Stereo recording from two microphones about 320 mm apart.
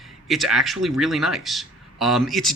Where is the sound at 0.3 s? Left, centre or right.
Centre.